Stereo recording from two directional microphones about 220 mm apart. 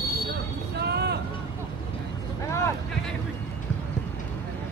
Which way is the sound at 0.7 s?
50° right (ahead or behind).